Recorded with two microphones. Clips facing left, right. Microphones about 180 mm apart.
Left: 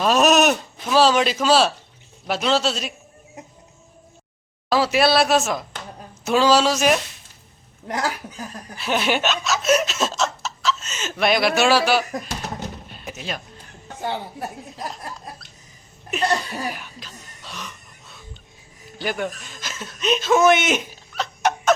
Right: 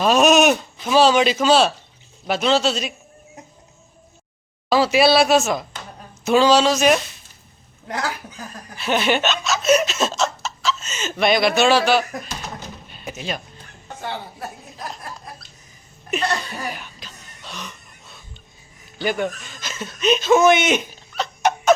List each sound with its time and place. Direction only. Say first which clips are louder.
0.0 s a man's voice: right 2 dB; centre (ahead or behind)
4.7 s a man's voice: right 2 dB; centre (ahead or behind)
7.9 s speech: left 1 dB; 20° left (ahead or behind)
8.8 s chuckle: right 2 dB; centre (ahead or behind)
12.9 s door: right 2 dB; centre (ahead or behind)
16.0 s sneeze: left 1 dB; 5° left (ahead or behind)
18.9 s speech: right 3 dB; centre (ahead or behind)